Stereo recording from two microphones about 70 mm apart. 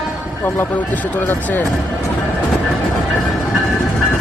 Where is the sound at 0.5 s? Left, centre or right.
Left.